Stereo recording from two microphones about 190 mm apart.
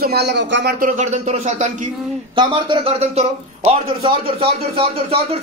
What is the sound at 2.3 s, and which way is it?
A man's voice, 25° right (ahead or behind).